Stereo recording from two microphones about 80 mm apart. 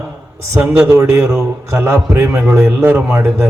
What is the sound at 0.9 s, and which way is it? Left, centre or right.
A man's voice, right.